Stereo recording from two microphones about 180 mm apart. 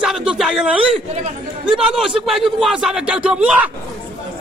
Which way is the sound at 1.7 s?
5° right (ahead or behind).